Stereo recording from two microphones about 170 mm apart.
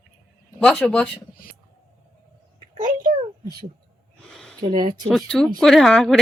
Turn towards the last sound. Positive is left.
turn(degrees=0)  # may be behind; listen again after turning